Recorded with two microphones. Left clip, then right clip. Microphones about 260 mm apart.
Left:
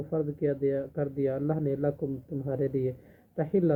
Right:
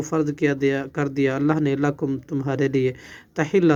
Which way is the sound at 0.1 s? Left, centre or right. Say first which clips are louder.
Right 7 dB; right.